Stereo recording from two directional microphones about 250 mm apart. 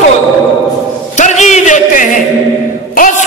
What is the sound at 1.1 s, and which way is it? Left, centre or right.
Singing, left.